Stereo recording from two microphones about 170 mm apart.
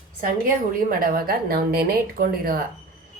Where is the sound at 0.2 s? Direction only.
55° right (ahead or behind).